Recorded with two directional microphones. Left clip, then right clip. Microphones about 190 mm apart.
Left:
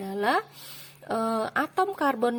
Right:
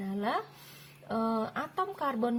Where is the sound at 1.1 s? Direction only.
45° left (ahead or behind).